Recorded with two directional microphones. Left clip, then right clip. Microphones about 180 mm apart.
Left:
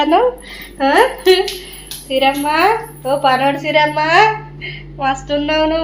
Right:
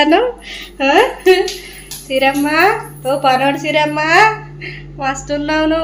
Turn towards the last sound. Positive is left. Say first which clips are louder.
# even
turn(degrees=-15)  # may be behind; listen again after turning